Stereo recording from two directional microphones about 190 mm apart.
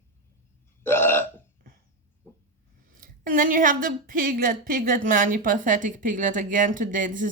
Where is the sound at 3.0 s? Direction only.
45° right (ahead or behind).